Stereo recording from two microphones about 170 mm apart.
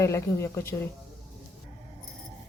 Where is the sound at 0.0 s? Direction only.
15° left (ahead or behind).